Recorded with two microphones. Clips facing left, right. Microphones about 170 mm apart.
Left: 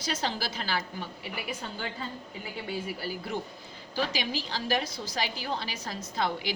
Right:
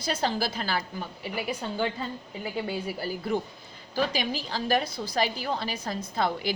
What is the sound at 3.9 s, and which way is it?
A woman's voice, 45° right (ahead or behind).